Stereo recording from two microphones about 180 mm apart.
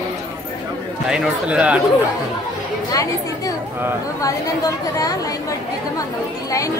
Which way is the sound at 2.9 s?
20° left (ahead or behind).